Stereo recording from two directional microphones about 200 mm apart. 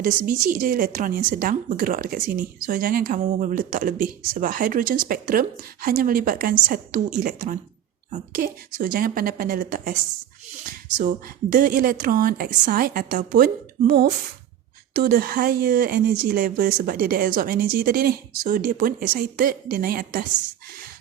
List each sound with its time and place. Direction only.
0.0 s a woman's voice: 40° right (ahead or behind)